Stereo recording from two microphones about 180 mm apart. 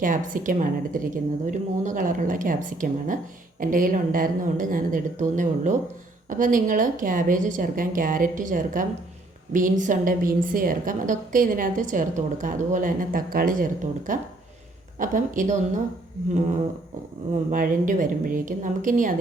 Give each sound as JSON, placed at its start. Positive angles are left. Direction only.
{"t": 0.0, "sound": "a woman's voice", "side_deg": -50}
{"t": 17.5, "sound": "a woman's voice", "side_deg": -50}